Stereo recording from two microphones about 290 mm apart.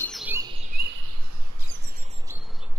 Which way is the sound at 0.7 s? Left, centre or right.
Right.